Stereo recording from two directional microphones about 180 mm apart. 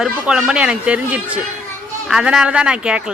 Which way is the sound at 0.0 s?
5° right (ahead or behind).